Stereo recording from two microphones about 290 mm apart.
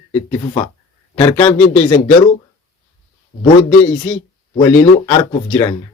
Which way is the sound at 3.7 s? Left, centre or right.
Centre.